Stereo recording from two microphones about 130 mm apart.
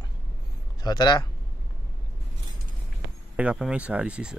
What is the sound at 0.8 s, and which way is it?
Speech, 30° left (ahead or behind).